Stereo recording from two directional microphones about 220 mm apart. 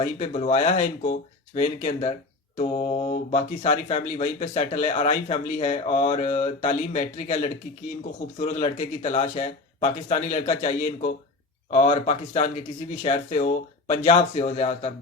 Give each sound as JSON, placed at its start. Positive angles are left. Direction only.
{"t": 0.2, "sound": "speech", "side_deg": 30}